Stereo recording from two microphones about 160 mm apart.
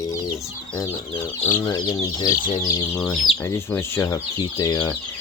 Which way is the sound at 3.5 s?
15° left (ahead or behind).